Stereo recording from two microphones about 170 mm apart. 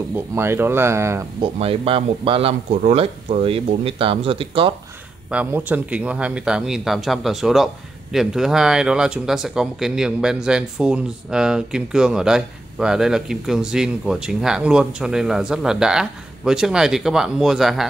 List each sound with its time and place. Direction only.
0.1 s speech: 15° right (ahead or behind)
1.4 s speech: 35° right (ahead or behind)
5.3 s speech: 10° right (ahead or behind)